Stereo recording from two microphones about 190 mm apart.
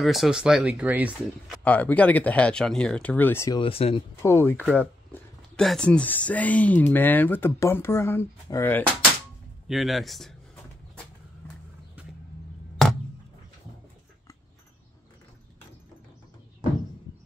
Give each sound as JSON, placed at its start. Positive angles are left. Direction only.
{"t": 0.0, "sound": "speech", "side_deg": 0}
{"t": 1.6, "sound": "speech", "side_deg": 10}
{"t": 3.5, "sound": "speech", "side_deg": 30}
{"t": 4.2, "sound": "speech", "side_deg": 15}
{"t": 9.7, "sound": "a sound", "side_deg": 0}